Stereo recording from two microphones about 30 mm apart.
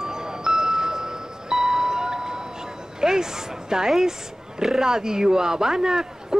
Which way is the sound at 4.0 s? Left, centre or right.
Centre.